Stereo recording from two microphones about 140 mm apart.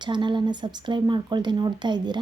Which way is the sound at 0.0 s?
35° right (ahead or behind).